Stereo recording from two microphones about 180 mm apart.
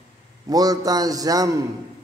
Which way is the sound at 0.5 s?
20° right (ahead or behind).